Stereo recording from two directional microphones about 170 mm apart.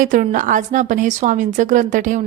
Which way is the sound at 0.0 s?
50° right (ahead or behind).